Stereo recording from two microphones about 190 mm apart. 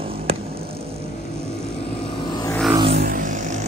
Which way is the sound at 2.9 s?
55° right (ahead or behind).